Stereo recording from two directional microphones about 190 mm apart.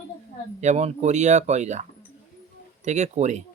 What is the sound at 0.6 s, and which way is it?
Speech, 35° right (ahead or behind).